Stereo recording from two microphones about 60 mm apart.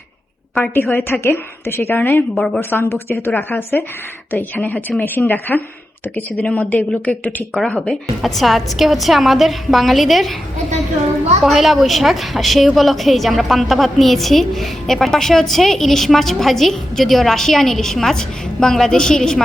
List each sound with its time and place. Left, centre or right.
0.6 s a woman's voice: left
2.3 s a woman's voice: centre
2.6 s a woman's voice: left
5.5 s a woman's voice: centre
6.1 s speech: left
7.5 s a woman's voice: centre
11.4 s a woman's voice: centre